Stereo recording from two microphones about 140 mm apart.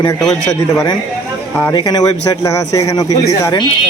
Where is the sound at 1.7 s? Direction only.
30° left (ahead or behind).